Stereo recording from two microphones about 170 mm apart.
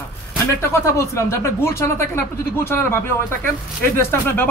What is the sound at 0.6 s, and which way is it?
Speech, 15° left (ahead or behind).